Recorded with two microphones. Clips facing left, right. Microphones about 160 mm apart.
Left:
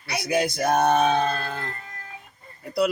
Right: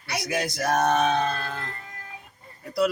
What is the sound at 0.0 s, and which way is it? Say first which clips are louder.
Speech: left 4 dB; centre (ahead or behind).